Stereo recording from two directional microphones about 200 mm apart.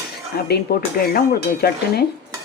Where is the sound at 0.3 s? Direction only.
50° left (ahead or behind).